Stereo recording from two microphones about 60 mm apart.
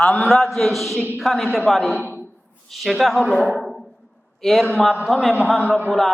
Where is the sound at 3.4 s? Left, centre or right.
Centre.